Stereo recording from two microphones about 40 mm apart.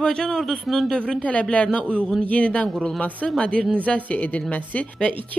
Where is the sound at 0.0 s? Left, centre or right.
Centre.